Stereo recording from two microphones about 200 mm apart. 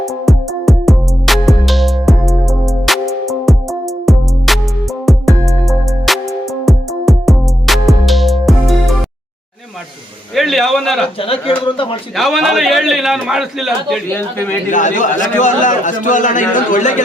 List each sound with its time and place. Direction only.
0.0 s music: centre (ahead or behind)
10.3 s a sound: centre (ahead or behind)
11.2 s speech: 25° left (ahead or behind)
12.1 s a man's voice: centre (ahead or behind)
14.1 s a man's voice: 10° left (ahead or behind)
14.7 s a man's voice: 40° left (ahead or behind)